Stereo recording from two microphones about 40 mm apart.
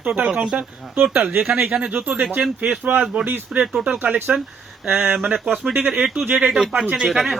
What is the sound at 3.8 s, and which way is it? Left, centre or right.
Speech, right.